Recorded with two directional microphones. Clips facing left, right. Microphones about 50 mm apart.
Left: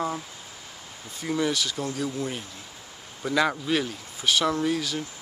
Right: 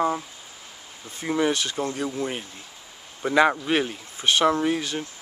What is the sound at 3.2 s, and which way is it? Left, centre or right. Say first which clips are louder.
Speech: right 5 dB; right.